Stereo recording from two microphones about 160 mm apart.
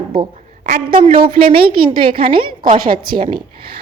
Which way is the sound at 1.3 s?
70° right (ahead or behind).